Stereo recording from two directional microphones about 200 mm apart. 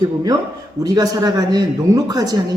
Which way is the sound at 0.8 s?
20° right (ahead or behind).